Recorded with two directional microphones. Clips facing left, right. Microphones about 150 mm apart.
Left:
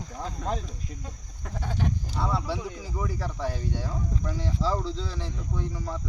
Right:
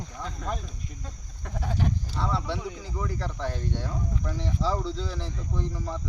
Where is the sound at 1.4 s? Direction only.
Centre (ahead or behind).